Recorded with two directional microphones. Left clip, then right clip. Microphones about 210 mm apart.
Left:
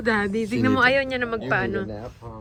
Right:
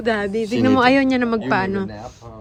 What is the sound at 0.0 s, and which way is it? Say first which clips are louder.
Speech: right 3 dB; 5° right (ahead or behind).